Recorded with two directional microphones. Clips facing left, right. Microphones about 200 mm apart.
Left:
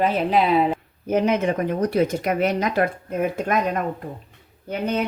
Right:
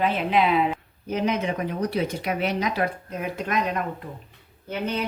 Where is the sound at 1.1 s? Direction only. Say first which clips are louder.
Left 5 dB; 50° left (ahead or behind).